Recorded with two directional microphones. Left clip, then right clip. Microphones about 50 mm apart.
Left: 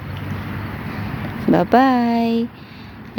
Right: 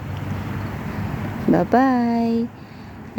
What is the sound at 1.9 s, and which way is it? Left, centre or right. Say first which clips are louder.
Speech: left 3 dB; left.